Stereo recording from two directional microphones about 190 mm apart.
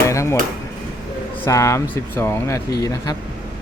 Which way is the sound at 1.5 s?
15° left (ahead or behind).